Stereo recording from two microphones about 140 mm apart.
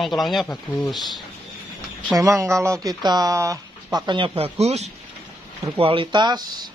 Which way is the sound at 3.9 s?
35° right (ahead or behind).